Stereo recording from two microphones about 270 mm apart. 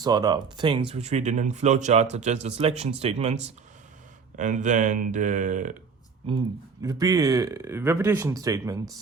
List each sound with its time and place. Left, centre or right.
0.0 s speech: centre
6.8 s speech: centre